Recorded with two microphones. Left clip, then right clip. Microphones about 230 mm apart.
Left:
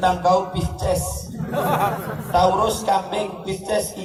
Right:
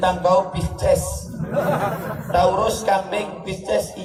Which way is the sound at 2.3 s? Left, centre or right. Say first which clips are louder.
Even; right.